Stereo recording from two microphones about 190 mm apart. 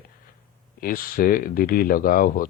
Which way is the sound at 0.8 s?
50° left (ahead or behind).